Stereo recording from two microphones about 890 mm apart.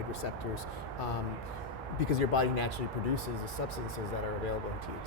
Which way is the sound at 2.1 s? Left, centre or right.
Left.